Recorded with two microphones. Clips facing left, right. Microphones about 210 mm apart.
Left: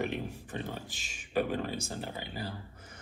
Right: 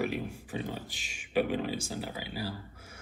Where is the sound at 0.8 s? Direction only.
45° left (ahead or behind).